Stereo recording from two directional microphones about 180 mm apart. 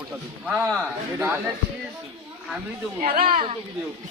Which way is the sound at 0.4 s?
5° right (ahead or behind).